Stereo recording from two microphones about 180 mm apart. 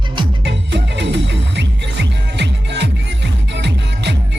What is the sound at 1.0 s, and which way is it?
Music, 75° right (ahead or behind).